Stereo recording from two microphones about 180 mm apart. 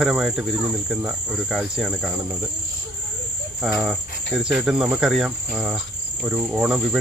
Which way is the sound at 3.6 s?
5° right (ahead or behind).